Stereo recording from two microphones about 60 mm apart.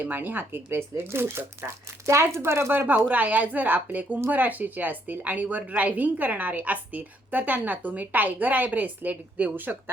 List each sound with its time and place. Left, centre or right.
0.0 s speech: right
2.8 s a woman's voice: right